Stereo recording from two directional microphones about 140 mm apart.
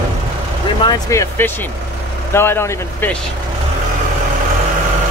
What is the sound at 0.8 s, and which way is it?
Speech, 25° left (ahead or behind).